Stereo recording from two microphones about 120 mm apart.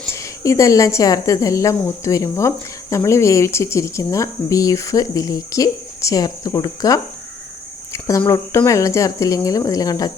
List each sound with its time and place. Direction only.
0.1 s speech: 25° left (ahead or behind)